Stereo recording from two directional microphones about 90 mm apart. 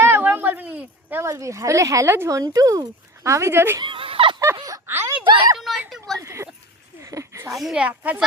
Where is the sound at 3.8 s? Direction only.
75° right (ahead or behind).